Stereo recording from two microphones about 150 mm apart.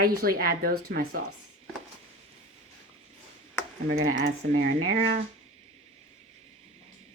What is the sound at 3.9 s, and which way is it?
Speech, 80° right.